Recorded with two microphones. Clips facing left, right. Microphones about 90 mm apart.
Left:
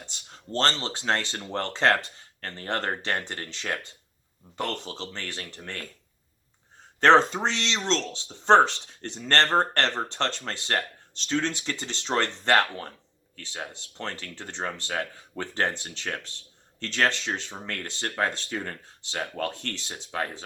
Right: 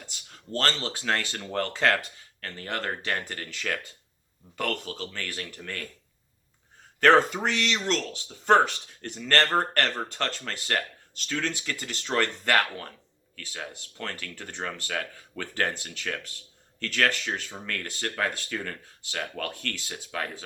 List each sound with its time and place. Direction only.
0.0 s speech: 30° left (ahead or behind)
7.0 s speech: 25° left (ahead or behind)